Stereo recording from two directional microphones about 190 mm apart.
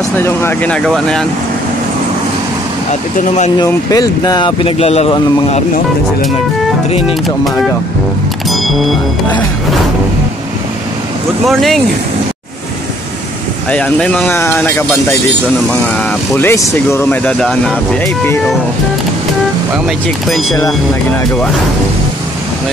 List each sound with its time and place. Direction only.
0.2 s speech: 10° left (ahead or behind)
2.9 s speech: 40° left (ahead or behind)
3.5 s speech: 20° left (ahead or behind)
8.5 s music: centre (ahead or behind)
11.4 s speech: centre (ahead or behind)
13.7 s speech: 5° left (ahead or behind)
16.3 s speech: 15° left (ahead or behind)
20.2 s speech: centre (ahead or behind)